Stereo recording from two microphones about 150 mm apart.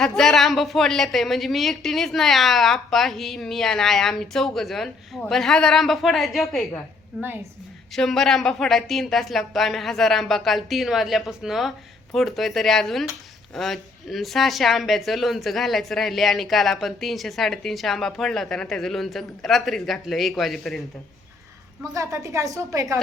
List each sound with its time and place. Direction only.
0.0 s speech: centre (ahead or behind)
21.9 s a woman's voice: 20° right (ahead or behind)